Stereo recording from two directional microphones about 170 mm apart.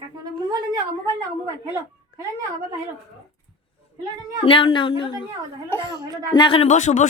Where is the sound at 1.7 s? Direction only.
15° right (ahead or behind).